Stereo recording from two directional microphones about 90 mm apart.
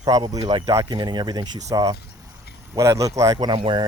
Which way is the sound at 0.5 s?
60° right (ahead or behind).